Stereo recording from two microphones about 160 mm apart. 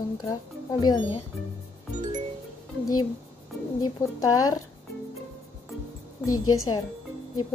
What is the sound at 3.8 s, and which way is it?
Speech, 25° left (ahead or behind).